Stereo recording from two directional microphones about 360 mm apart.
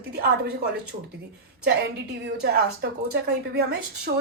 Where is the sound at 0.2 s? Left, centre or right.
Right.